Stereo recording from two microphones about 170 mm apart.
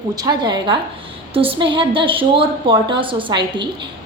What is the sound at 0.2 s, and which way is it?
A woman's voice, 25° right (ahead or behind).